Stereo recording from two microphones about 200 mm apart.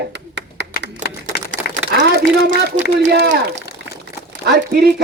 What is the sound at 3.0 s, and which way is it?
A man's voice, 55° right (ahead or behind).